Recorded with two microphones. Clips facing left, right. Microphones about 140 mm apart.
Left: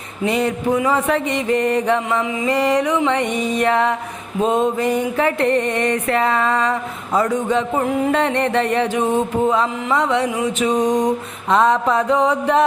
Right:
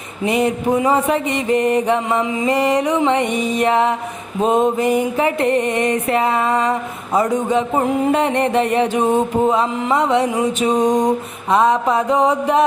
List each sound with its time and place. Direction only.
0.3 s mantra: 15° right (ahead or behind)
2.6 s music: 20° right (ahead or behind)
4.4 s mantra: 15° right (ahead or behind)
9.5 s music: 20° right (ahead or behind)
11.5 s mantra: 10° right (ahead or behind)